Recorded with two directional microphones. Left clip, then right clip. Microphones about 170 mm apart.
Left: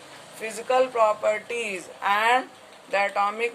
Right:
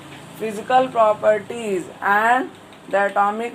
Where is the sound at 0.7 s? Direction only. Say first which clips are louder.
Right 5 dB; 50° left (ahead or behind).